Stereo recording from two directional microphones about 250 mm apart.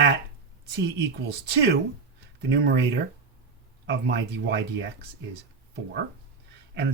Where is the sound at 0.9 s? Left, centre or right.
Right.